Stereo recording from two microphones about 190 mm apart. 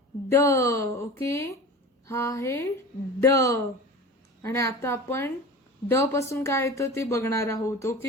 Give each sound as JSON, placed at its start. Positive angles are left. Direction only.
{"t": 0.3, "sound": "a woman's voice", "side_deg": 15}